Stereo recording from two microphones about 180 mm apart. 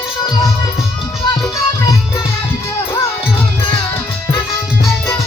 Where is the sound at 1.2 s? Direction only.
25° left (ahead or behind).